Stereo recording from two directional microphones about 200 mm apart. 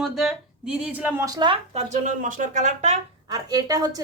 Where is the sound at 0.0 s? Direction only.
Centre (ahead or behind); by 1.8 s 25° right (ahead or behind).